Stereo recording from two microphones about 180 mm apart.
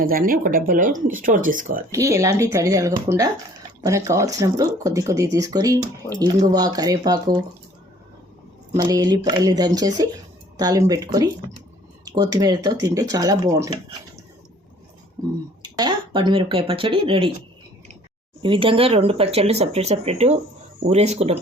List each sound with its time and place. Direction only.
0.0 s speech: 50° right (ahead or behind)
1.9 s speech: 15° right (ahead or behind)
8.8 s speech: 20° right (ahead or behind)
15.6 s speech: 25° right (ahead or behind)
18.4 s speech: 30° right (ahead or behind)